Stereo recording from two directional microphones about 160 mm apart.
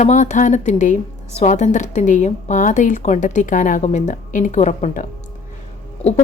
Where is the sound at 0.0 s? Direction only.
45° left (ahead or behind).